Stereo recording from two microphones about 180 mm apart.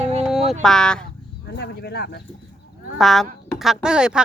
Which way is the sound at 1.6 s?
65° left (ahead or behind).